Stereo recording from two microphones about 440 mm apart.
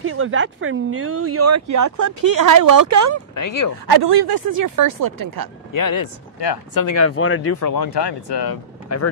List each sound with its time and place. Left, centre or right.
0.0 s speech: right
3.3 s speech: left
3.8 s speech: right
4.6 s speech: right
5.7 s speech: left
6.8 s speech: left
7.6 s speech: left
8.8 s speech: left